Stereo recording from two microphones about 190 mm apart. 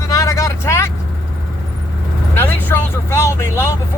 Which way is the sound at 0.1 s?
15° left (ahead or behind).